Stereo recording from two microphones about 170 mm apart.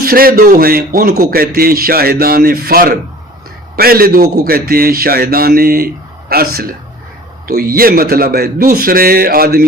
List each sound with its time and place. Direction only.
0.0 s a man's voice: 60° right (ahead or behind)